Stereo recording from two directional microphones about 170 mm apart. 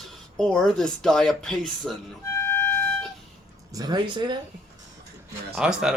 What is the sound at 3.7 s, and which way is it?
Speech, 25° right (ahead or behind).